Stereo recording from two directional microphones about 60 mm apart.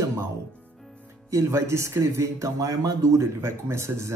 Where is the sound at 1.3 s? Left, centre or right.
Right.